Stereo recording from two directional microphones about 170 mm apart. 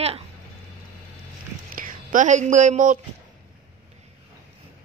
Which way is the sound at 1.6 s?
55° right (ahead or behind).